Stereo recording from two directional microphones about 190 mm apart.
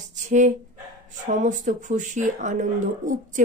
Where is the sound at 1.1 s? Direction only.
40° right (ahead or behind).